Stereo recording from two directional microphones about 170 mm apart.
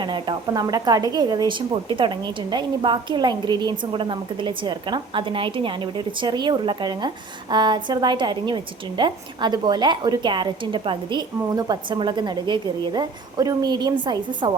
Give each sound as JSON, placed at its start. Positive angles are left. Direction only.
{"t": 0.0, "sound": "speech", "side_deg": -25}